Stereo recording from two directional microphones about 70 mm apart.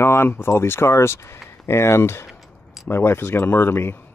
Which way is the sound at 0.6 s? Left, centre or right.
Left.